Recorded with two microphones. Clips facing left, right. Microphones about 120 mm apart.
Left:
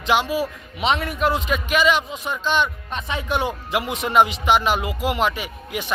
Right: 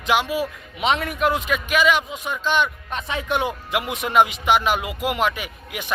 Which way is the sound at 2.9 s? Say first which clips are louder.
Even; 20° left (ahead or behind).